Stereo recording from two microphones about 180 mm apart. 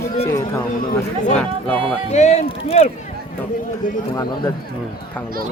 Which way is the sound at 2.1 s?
40° left (ahead or behind).